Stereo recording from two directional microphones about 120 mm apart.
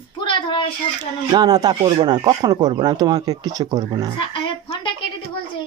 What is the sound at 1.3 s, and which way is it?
Speech, 35° right (ahead or behind).